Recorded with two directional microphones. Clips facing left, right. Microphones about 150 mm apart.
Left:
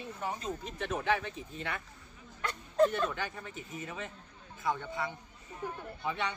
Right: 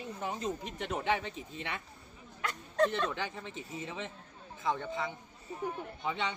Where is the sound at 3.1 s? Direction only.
20° right (ahead or behind).